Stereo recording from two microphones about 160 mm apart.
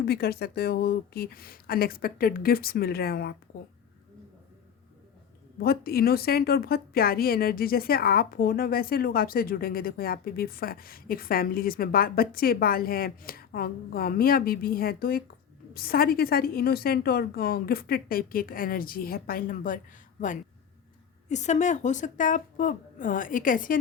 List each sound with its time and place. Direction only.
0.0 s a woman's voice: 80° left
5.5 s a woman's voice: 70° left (ahead or behind)